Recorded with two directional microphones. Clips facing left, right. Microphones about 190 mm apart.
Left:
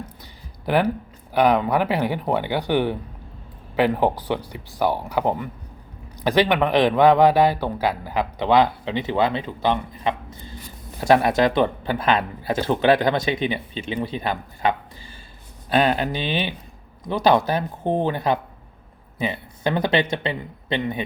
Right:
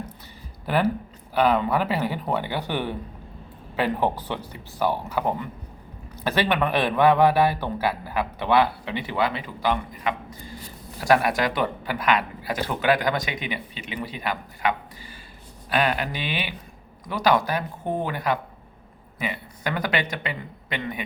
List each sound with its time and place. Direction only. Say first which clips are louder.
0.6 s a man's voice: left 3 dB; 15° left (ahead or behind)